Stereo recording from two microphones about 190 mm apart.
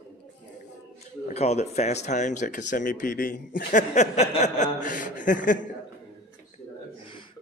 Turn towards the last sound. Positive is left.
turn(degrees=45)  # may be behind; listen again after turning